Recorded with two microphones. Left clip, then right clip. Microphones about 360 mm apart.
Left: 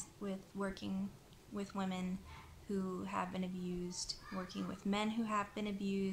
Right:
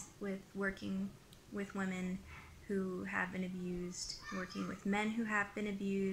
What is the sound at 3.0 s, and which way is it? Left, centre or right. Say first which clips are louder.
Speech: right 1 dB; centre.